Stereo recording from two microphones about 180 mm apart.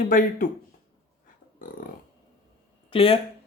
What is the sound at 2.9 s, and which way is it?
Speech, 30° left (ahead or behind).